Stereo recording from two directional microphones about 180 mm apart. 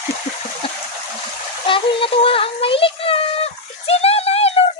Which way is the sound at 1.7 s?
30° left (ahead or behind).